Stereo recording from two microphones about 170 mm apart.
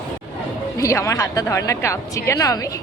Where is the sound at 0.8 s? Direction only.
20° left (ahead or behind).